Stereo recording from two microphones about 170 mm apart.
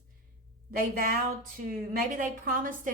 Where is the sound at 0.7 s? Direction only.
55° right (ahead or behind).